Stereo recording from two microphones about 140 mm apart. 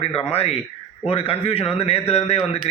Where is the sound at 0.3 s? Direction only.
45° left (ahead or behind).